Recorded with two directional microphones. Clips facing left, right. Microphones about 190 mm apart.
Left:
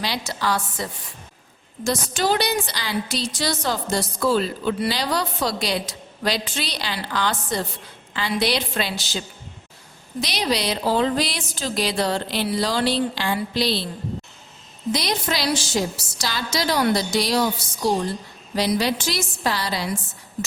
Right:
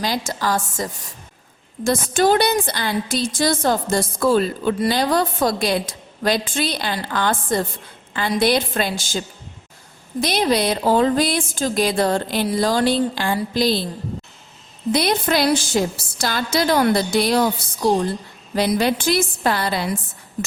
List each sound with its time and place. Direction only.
0.0 s a woman's voice: 45° right (ahead or behind)
14.9 s a woman's voice: 55° right (ahead or behind)